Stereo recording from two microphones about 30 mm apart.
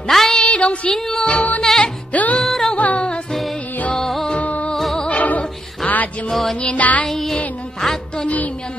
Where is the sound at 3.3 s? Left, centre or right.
Centre.